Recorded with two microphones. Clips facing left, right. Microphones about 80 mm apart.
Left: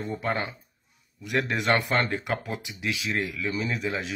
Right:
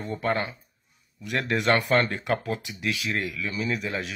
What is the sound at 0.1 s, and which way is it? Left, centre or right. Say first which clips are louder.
Speech: right 4 dB; centre.